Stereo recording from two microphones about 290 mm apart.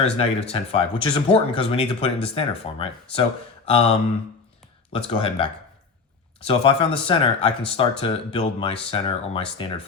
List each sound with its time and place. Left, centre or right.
0.0 s speech: left
6.5 s speech: centre